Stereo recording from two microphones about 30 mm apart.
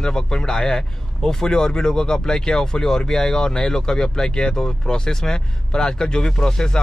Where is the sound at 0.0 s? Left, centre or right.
Left.